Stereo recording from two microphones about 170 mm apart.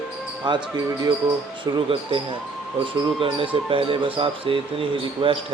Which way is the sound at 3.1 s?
30° right (ahead or behind).